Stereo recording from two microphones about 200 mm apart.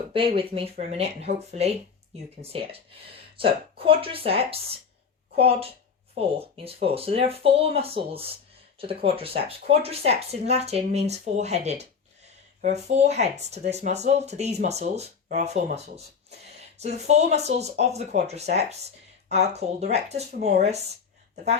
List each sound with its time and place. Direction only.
0.1 s speech: 25° right (ahead or behind)
16.5 s a sound: 35° right (ahead or behind)
17.1 s speech: 35° right (ahead or behind)